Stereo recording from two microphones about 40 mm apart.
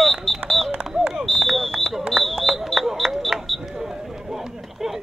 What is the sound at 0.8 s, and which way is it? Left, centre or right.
Smoke detector, right.